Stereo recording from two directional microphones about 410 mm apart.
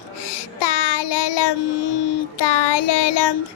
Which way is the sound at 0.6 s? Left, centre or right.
Left.